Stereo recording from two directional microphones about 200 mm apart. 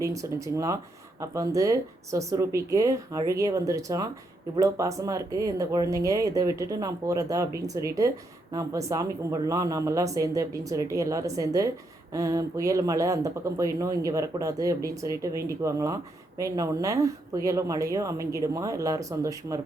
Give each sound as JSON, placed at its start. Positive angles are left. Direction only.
{"t": 0.0, "sound": "speech", "side_deg": -15}